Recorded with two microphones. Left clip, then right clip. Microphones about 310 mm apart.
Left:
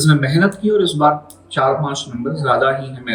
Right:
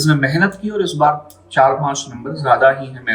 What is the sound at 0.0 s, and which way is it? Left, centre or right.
A man's voice, right.